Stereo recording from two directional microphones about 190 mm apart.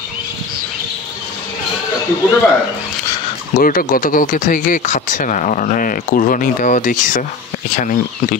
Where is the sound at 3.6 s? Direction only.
45° left (ahead or behind).